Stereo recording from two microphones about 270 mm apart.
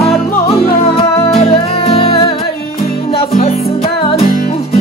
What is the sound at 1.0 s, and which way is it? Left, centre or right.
Music, left.